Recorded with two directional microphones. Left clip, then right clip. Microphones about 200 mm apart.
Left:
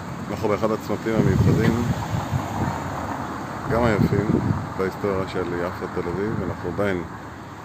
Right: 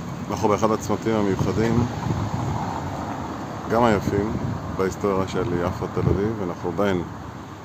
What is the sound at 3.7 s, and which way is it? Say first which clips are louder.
Speech: right 2 dB; 15° right (ahead or behind).